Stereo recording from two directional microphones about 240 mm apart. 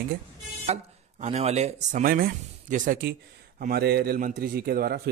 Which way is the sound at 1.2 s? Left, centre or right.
Right.